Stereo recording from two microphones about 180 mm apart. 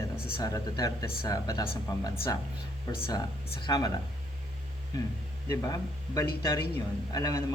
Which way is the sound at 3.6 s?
25° left (ahead or behind).